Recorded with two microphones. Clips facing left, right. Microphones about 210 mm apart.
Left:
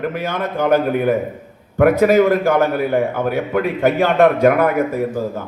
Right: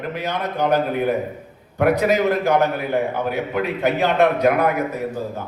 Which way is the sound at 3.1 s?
50° left (ahead or behind).